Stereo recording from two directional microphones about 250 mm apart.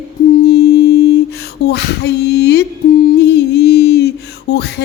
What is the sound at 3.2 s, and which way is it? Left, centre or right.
Music, left.